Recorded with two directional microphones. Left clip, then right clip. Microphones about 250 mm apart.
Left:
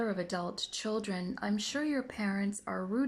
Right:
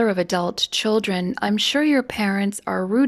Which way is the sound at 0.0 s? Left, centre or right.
Right.